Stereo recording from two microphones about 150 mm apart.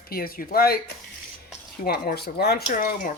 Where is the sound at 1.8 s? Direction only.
90° left; by 3.1 s 65° left (ahead or behind).